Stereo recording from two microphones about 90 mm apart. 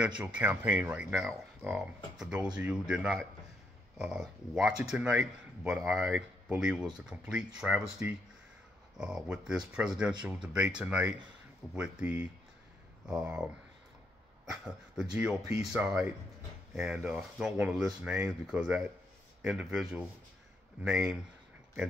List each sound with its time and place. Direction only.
0.2 s speech: 15° right (ahead or behind)
0.9 s speech: 5° right (ahead or behind)